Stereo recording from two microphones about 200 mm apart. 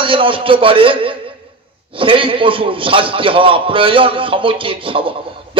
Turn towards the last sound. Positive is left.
turn(degrees=-25)  # may be behind; listen again after turning